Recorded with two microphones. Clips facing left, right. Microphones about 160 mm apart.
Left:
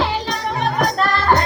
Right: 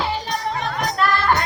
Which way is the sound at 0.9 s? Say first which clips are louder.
Right 2 dB; 35° left (ahead or behind).